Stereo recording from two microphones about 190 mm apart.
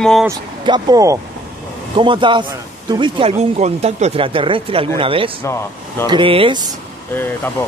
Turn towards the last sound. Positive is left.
turn(degrees=10)  # may be behind; listen again after turning